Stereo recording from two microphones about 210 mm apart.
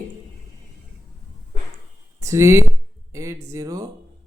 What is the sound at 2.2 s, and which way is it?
A man's voice, 15° right (ahead or behind).